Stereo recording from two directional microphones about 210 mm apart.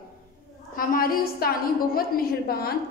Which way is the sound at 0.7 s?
45° left (ahead or behind).